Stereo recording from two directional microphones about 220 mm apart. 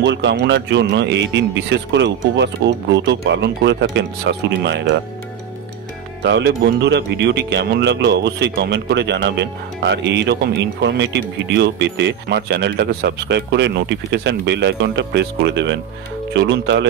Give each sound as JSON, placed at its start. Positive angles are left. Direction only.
{"t": 0.0, "sound": "speech", "side_deg": -55}
{"t": 6.2, "sound": "speech", "side_deg": -55}